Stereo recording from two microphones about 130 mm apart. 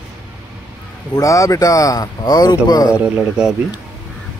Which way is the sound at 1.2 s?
25° left (ahead or behind).